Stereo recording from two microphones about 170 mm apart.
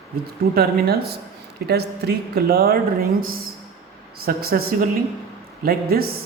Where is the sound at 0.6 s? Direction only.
65° right (ahead or behind).